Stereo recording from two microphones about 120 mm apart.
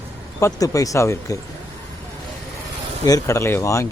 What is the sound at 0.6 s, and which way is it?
Speech, 30° left (ahead or behind).